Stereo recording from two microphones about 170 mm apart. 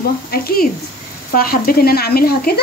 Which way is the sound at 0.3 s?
65° left (ahead or behind).